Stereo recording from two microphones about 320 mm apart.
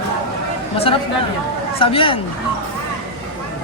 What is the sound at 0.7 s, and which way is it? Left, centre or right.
Speech, centre.